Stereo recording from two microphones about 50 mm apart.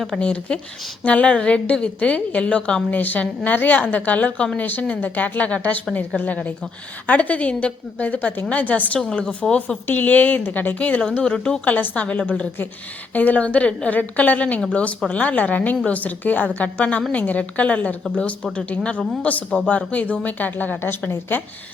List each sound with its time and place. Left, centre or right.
0.2 s a woman's voice: left
2.9 s a woman's voice: left; by 11.6 s centre
11.6 s a woman's voice: left